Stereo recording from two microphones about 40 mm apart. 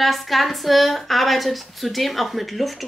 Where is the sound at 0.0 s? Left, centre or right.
Centre.